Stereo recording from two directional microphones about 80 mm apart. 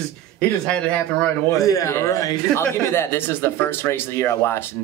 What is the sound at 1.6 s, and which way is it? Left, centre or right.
Speech, left.